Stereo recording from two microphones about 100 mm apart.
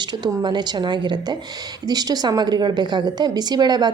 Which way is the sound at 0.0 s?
45° right (ahead or behind).